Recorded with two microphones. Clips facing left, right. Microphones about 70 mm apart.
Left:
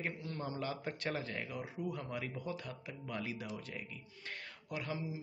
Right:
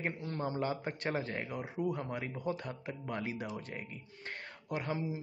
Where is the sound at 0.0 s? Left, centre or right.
Right.